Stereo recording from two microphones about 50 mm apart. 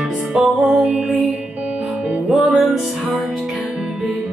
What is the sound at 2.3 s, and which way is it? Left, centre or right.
Music, centre.